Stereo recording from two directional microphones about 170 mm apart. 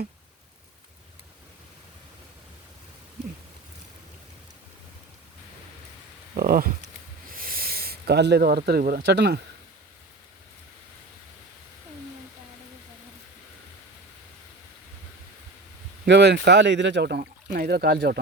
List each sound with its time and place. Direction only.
6.3 s speech: 60° right (ahead or behind); by 9.4 s 90° right
16.0 s speech: 90° right; by 18.2 s 70° right (ahead or behind)